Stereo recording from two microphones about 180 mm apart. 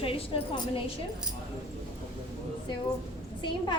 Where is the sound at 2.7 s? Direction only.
25° left (ahead or behind).